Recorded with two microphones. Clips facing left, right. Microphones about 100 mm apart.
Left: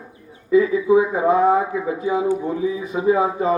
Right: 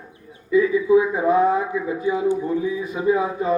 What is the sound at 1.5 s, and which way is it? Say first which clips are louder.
Speech: left 2 dB; 60° left (ahead or behind).